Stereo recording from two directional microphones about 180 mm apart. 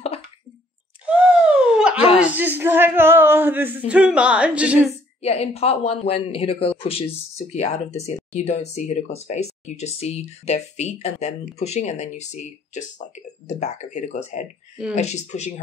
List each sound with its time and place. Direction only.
1.0 s a sound: 5° right (ahead or behind)
2.1 s speech: 10° right (ahead or behind)
5.2 s speech: 35° left (ahead or behind)